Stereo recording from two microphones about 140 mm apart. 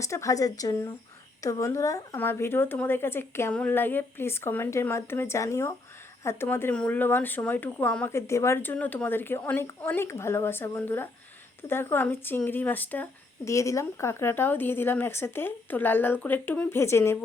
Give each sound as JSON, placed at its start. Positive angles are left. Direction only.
{"t": 0.0, "sound": "speech", "side_deg": 20}